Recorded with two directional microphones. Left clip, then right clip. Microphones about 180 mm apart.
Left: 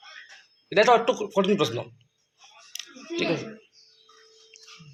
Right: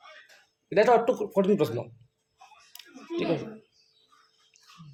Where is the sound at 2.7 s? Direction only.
10° right (ahead or behind).